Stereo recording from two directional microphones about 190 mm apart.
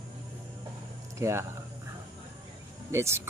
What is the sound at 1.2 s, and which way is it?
Speech, 15° right (ahead or behind).